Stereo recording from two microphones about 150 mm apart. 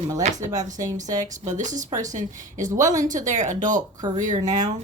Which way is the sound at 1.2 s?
55° right (ahead or behind).